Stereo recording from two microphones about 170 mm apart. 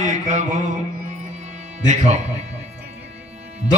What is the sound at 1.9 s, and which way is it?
Mantra, 45° right (ahead or behind).